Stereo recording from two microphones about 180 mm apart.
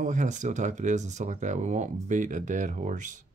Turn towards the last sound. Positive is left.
turn(degrees=-45)  # may be behind; listen again after turning